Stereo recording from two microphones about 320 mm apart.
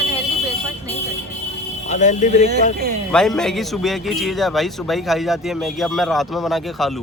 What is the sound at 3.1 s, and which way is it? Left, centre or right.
A man's voice, centre.